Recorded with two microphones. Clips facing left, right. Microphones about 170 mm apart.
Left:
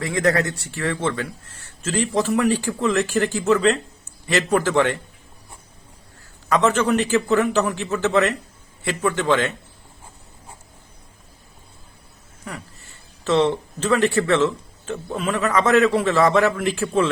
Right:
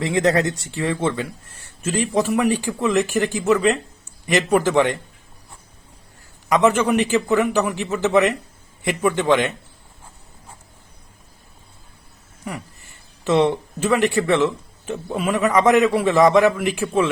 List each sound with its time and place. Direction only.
0.0 s speech: 20° right (ahead or behind)
6.5 s speech: 15° right (ahead or behind)
12.4 s speech: 15° right (ahead or behind)